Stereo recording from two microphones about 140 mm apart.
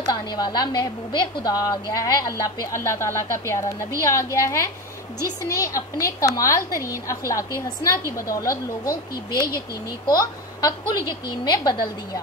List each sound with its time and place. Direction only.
0.1 s a woman's voice: 30° left (ahead or behind)
8.8 s speech: 90° left
10.0 s a woman's voice: 25° left (ahead or behind)